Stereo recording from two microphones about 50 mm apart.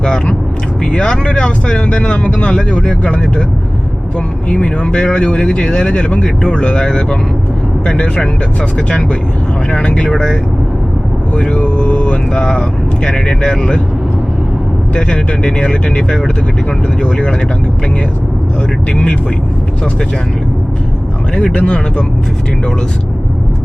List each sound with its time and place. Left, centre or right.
0.0 s speech: centre
4.4 s speech: centre
6.2 s speech: centre
9.7 s speech: left
11.3 s speech: left
14.9 s speech: centre
21.3 s speech: left